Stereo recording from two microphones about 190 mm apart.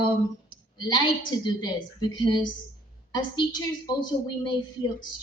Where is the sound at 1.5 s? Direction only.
20° left (ahead or behind).